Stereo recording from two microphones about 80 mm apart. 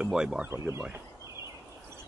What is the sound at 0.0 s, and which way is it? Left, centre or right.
Speech, centre.